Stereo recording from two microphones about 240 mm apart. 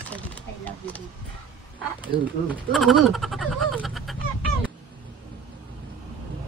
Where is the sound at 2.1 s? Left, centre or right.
Right.